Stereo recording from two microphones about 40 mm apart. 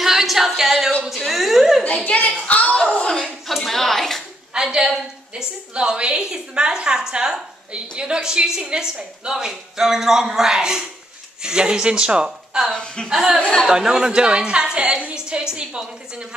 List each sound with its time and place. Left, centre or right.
0.0 s singing: centre
1.1 s a woman's voice: centre
1.9 s a woman's voice: left
2.4 s a sound: left
3.6 s a sound: centre
4.6 s a woman's voice: centre
12.3 s speech: centre
12.7 s a woman's voice: centre
13.1 s a woman's voice: centre